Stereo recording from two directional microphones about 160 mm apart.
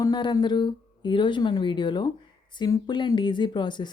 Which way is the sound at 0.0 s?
25° left (ahead or behind).